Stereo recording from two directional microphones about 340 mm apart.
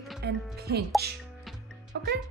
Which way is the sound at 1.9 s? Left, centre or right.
Right.